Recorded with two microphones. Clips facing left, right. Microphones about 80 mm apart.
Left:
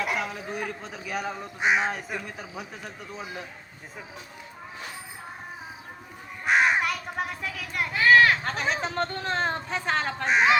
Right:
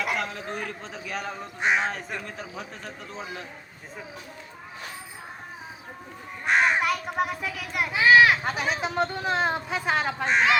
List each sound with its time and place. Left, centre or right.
0.0 s speech: centre
6.4 s crow: centre